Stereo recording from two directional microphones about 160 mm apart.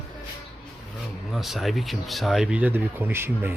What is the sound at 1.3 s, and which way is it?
Speech, centre (ahead or behind).